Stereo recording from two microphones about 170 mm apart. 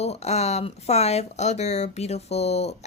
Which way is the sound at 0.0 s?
40° left (ahead or behind).